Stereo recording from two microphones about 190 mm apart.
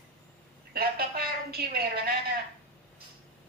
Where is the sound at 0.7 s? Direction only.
50° right (ahead or behind).